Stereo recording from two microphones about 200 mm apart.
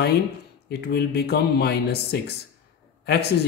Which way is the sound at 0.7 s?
55° left (ahead or behind).